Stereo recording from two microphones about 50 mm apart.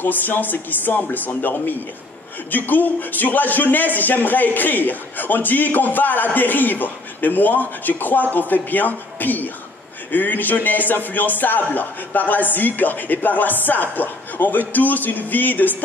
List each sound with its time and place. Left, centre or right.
0.0 s a man's voice: left
2.5 s a man's voice: left